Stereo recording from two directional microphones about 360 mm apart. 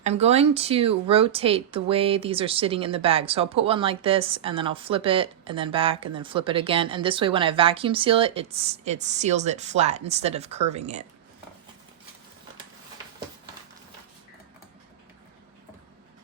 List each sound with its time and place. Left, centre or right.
0.0 s speech: centre